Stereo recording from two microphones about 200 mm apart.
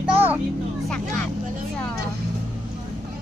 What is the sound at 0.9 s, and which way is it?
Speech, 5° left (ahead or behind).